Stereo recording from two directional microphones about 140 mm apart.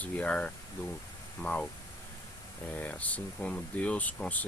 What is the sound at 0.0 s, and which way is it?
Speech, 10° left (ahead or behind).